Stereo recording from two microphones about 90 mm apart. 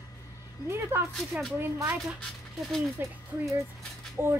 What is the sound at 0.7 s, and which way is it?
A woman's voice, 30° right (ahead or behind).